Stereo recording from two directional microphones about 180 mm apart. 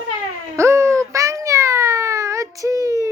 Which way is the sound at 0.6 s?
15° right (ahead or behind).